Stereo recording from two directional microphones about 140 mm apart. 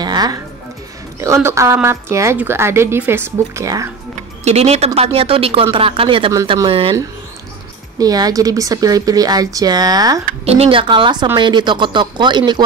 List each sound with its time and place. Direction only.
0.0 s music: 30° right (ahead or behind)
1.2 s a woman's voice: 20° right (ahead or behind)
4.5 s speech: 50° right (ahead or behind)
8.0 s a woman's voice: 25° right (ahead or behind)
10.4 s speech: 45° right (ahead or behind)